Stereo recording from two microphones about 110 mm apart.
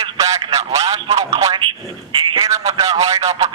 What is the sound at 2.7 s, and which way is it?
Speech, 35° right (ahead or behind).